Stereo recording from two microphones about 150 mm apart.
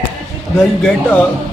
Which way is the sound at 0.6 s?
5° left (ahead or behind).